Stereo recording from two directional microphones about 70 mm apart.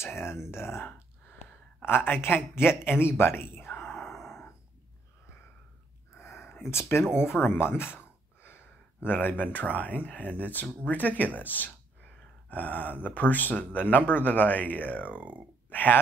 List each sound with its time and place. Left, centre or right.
0.0 s speech: left
3.9 s a sound: centre
6.1 s a sound: left
6.7 s speech: left
15.1 s speech: right
15.7 s speech: left